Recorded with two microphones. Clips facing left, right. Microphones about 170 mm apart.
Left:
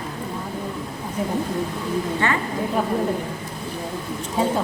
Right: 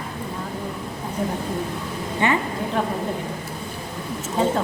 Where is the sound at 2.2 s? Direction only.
15° right (ahead or behind).